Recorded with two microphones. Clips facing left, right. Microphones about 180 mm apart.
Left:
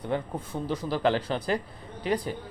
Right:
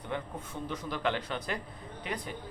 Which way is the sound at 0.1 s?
35° left (ahead or behind).